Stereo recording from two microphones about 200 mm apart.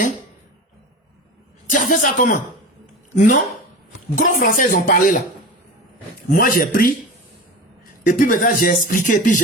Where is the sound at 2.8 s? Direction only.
35° left (ahead or behind).